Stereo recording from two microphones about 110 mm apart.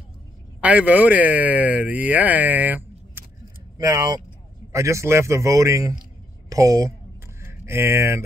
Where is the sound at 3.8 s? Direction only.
35° right (ahead or behind).